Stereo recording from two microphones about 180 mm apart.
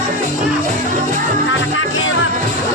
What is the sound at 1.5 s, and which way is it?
Music, 90° left.